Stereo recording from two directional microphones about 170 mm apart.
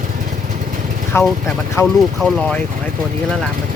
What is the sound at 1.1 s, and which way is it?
Speech, 15° left (ahead or behind).